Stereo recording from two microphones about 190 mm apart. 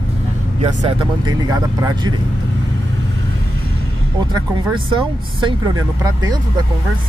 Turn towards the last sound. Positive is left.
turn(degrees=-20)  # may be behind; listen again after turning